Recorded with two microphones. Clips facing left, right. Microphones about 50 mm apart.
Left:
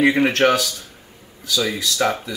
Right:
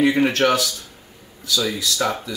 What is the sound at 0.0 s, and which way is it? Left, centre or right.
Speech, left.